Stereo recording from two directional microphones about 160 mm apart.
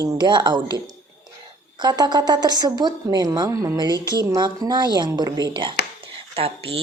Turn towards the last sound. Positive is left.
turn(degrees=-35)  # may be behind; listen again after turning